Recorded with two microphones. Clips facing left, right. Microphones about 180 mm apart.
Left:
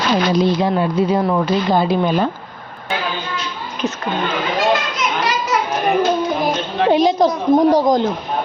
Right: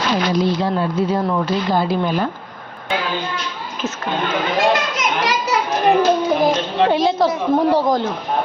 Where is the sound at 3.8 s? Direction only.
15° left (ahead or behind).